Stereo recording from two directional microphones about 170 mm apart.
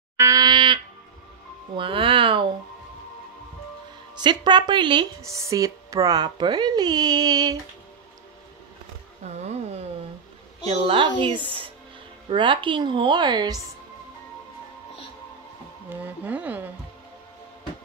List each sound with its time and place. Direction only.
0.2 s livestock: 20° right (ahead or behind)
1.8 s speech: 30° right (ahead or behind)
4.2 s speech: 25° right (ahead or behind)
9.2 s a sound: 40° right (ahead or behind)
10.6 s a woman's voice: 35° right (ahead or behind)
15.9 s speech: 10° right (ahead or behind)